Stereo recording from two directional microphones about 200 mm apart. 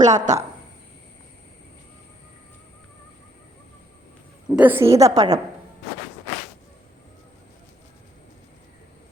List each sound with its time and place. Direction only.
0.0 s a woman's voice: 35° right (ahead or behind)
4.4 s a woman's voice: 5° right (ahead or behind)